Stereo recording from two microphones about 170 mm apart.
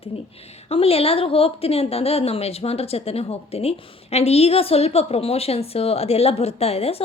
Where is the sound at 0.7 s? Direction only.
35° left (ahead or behind).